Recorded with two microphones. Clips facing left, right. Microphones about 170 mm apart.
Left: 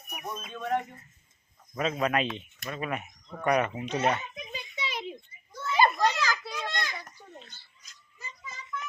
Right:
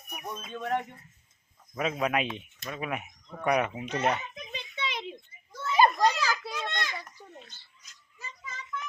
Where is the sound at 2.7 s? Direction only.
5° right (ahead or behind).